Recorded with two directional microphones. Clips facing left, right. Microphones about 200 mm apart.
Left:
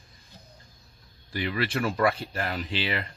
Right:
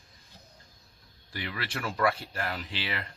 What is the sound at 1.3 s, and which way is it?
Speech, 20° left (ahead or behind).